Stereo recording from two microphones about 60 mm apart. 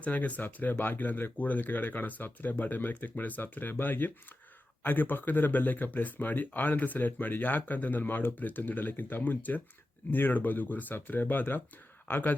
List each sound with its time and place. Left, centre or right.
0.0 s speech: left